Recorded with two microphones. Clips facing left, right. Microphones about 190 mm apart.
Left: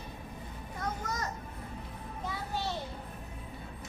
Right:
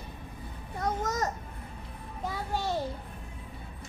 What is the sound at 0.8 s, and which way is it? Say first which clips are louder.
Music: right 6 dB; 45° right (ahead or behind).